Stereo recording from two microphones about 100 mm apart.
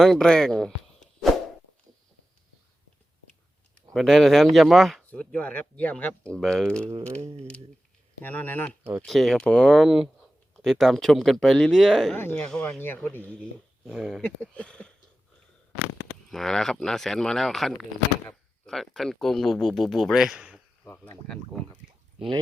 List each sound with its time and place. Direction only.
0.0 s speech: 5° left (ahead or behind)
3.9 s speech: 5° left (ahead or behind)
5.1 s speech: 10° left (ahead or behind)
8.2 s speech: 15° left (ahead or behind)
9.0 s speech: 5° left (ahead or behind)
12.1 s speech: 15° left (ahead or behind)
12.8 s speech: 20° left (ahead or behind)
13.8 s speech: 5° right (ahead or behind)
14.4 s speech: 10° left (ahead or behind)
16.3 s speech: 5° left (ahead or behind)
20.8 s speech: 15° left (ahead or behind)
21.2 s speech: centre (ahead or behind)